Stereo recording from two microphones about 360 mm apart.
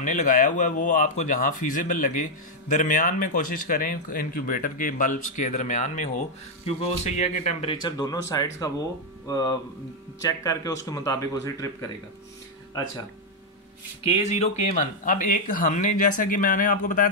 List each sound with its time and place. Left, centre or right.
0.0 s speech: left
14.0 s speech: centre